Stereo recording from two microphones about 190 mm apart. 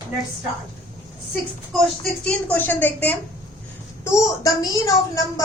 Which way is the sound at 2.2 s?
10° left (ahead or behind).